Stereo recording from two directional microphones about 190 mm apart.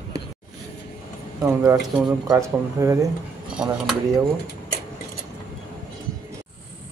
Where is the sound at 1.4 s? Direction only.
15° right (ahead or behind).